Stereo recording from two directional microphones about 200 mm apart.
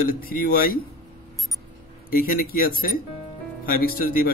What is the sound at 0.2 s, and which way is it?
Speech, 45° left (ahead or behind).